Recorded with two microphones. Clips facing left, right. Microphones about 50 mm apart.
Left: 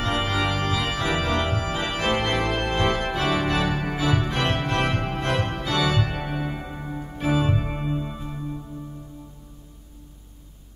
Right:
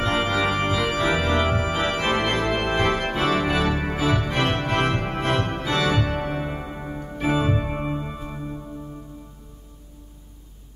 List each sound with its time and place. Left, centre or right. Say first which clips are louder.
0.4 s organ: right 3 dB; centre
6.0 s music: right 4 dB; right
6.3 s music: right 1 dB; centre
7.0 s organ: right 1 dB; centre
7.3 s organ: even; centre
7.9 s music: even; centre